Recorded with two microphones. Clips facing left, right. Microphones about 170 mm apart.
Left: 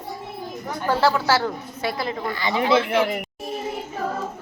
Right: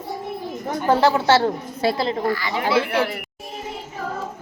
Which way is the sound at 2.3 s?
20° left (ahead or behind).